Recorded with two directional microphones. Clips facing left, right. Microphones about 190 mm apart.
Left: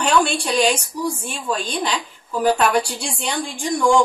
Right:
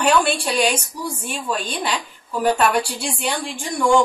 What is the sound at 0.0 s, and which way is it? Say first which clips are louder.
A woman's voice: right 1 dB; 5° right (ahead or behind).